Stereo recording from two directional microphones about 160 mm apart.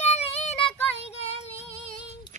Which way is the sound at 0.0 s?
40° left (ahead or behind).